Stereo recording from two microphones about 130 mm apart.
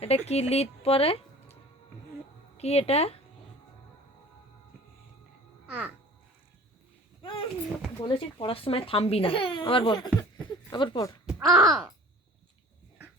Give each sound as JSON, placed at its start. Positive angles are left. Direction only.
{"t": 0.0, "sound": "speech", "side_deg": 50}
{"t": 2.6, "sound": "speech", "side_deg": 55}
{"t": 5.6, "sound": "speech", "side_deg": -5}
{"t": 7.2, "sound": "a sound", "side_deg": 40}
{"t": 8.0, "sound": "speech", "side_deg": 40}
{"t": 11.3, "sound": "groan", "side_deg": -5}